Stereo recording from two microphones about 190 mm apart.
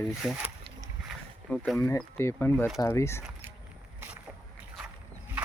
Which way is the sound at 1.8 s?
10° left (ahead or behind).